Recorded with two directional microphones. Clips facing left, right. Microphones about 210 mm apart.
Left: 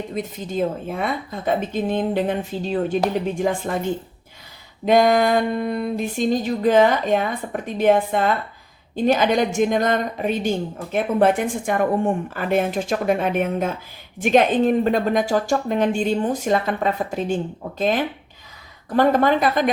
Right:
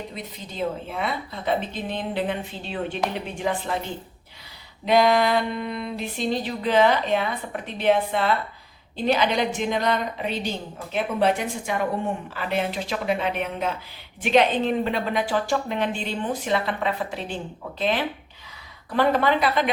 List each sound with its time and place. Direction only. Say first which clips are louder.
0.1 s a woman's voice: left 10 dB; 45° left (ahead or behind)